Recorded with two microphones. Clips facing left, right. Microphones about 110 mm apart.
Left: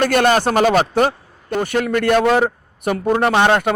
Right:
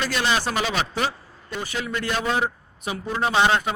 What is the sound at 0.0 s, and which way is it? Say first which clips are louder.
Speech: left 9 dB; 55° left (ahead or behind).